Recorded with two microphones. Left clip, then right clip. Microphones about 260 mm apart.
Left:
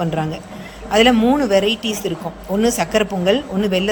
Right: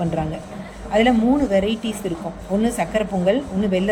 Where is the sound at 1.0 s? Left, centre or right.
Centre.